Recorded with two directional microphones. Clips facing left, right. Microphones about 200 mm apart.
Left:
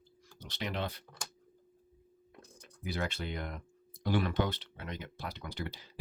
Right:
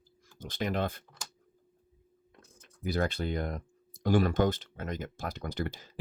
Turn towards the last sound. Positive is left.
turn(degrees=-45)  # may be behind; listen again after turning